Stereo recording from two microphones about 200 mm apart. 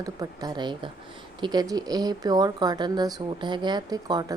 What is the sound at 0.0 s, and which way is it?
A woman's voice, 20° right (ahead or behind).